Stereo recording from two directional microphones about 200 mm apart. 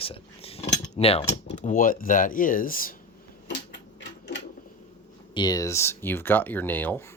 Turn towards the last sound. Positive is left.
turn(degrees=10)  # may be behind; listen again after turning